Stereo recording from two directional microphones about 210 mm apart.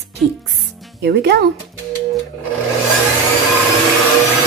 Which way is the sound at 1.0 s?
50° right (ahead or behind).